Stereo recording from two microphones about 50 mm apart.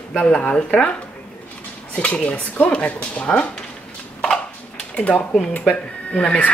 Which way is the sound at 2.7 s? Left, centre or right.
Left.